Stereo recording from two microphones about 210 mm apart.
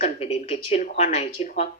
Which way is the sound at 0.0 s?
30° left (ahead or behind).